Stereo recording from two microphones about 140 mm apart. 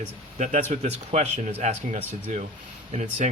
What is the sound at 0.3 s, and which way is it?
Speech, 60° right (ahead or behind).